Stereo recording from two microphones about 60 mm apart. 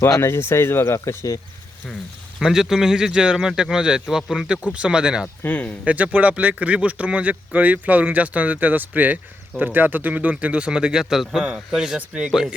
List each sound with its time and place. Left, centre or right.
0.2 s speech: left
2.4 s speech: centre
5.5 s speech: left
5.8 s a man's voice: right